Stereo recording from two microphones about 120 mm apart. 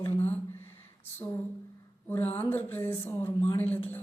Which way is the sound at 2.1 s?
15° left (ahead or behind).